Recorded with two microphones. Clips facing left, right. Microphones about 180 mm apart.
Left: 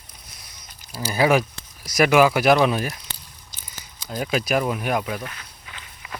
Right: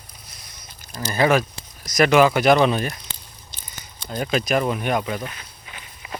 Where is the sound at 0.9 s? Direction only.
5° left (ahead or behind).